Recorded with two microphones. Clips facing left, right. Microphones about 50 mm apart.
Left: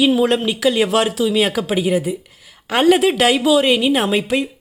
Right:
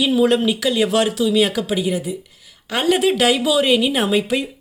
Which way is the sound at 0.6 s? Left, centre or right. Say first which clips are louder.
Left 2 dB; centre.